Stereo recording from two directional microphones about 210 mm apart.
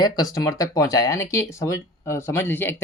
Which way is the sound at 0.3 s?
15° left (ahead or behind).